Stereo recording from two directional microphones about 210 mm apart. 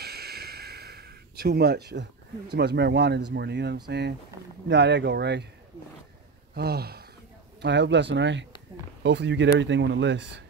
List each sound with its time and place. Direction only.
0.0 s a sound: 50° right (ahead or behind)
3.3 s speech: 55° right (ahead or behind)
6.5 s speech: 50° right (ahead or behind)